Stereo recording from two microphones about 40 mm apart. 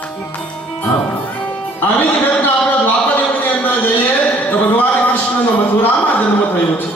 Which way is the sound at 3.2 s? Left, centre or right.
Left.